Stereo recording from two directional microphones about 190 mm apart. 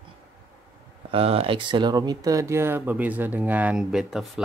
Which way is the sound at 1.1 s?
30° right (ahead or behind).